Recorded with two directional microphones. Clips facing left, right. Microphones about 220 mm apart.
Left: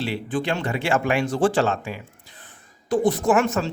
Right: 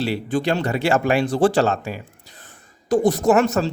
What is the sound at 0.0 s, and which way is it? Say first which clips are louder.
Speech: right 4 dB; 40° right (ahead or behind).